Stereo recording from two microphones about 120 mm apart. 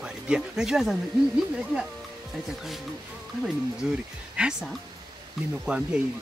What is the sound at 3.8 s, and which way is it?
Speech, 5° right (ahead or behind).